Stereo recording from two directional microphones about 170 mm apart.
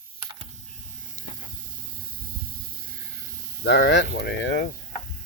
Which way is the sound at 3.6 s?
90° left.